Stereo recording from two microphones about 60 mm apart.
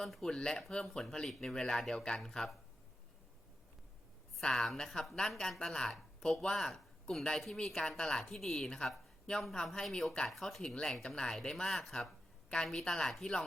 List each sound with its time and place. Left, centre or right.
0.0 s speech: centre
4.4 s speech: centre
11.9 s a sound: centre
12.6 s speech: centre